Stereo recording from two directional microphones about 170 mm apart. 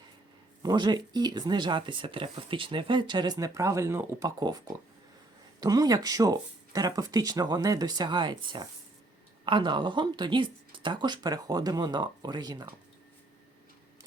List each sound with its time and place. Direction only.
0.6 s speech: 25° right (ahead or behind)